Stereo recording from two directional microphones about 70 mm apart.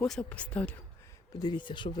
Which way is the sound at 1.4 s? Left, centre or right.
Left.